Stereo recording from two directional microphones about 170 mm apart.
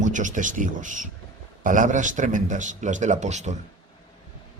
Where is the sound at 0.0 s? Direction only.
45° right (ahead or behind).